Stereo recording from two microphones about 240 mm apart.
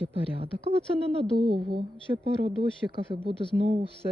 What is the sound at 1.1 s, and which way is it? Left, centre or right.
Speech, right.